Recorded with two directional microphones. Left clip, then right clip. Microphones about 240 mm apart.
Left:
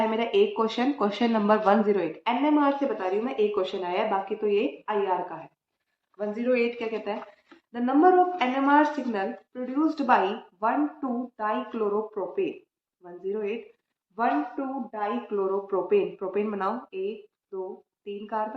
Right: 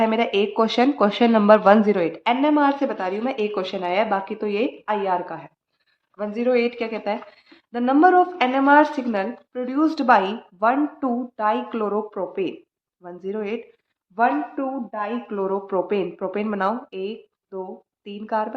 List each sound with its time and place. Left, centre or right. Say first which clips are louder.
0.0 s speech: right 3 dB; right